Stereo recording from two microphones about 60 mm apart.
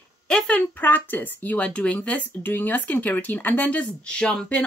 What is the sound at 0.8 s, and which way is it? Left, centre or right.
Speech, left.